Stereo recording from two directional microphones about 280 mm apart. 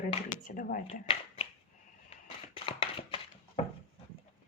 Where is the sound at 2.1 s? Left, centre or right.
Left.